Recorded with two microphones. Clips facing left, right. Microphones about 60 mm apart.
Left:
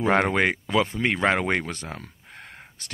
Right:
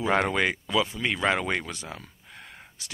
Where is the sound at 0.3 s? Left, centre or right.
Left.